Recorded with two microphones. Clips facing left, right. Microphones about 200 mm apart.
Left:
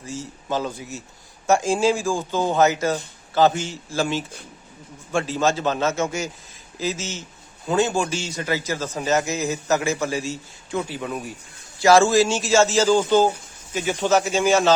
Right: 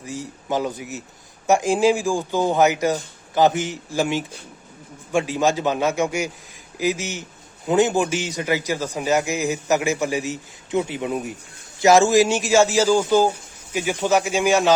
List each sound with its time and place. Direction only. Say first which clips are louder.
0.0 s a man's voice: right 1 dB; 15° right (ahead or behind)